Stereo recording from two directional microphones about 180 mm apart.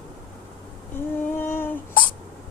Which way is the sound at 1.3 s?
10° left (ahead or behind).